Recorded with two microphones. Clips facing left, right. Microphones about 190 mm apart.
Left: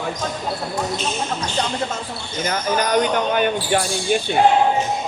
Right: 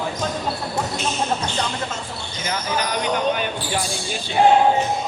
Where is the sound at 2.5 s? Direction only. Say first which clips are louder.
Left 4 dB; 50° left (ahead or behind).